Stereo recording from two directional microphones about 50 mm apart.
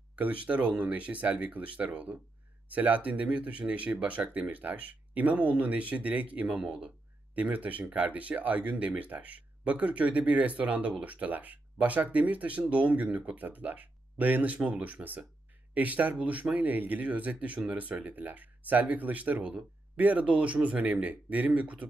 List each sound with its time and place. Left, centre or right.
0.1 s speech: right